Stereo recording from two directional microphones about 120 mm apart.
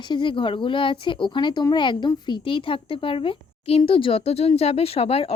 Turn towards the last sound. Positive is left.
turn(degrees=55)  # may be behind; listen again after turning